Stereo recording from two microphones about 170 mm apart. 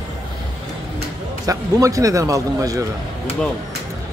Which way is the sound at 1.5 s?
20° right (ahead or behind).